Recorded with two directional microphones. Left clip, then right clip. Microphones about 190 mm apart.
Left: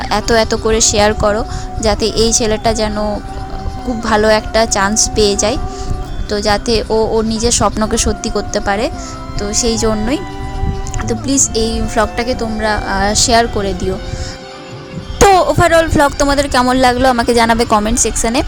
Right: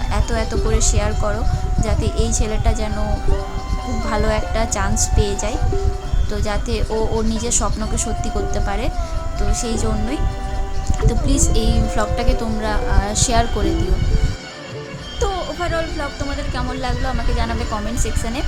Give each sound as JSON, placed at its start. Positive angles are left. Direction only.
{"t": 0.1, "sound": "speech", "side_deg": 45}
{"t": 4.0, "sound": "a woman's voice", "side_deg": 45}
{"t": 11.0, "sound": "a woman's voice", "side_deg": 30}
{"t": 15.2, "sound": "music", "side_deg": 55}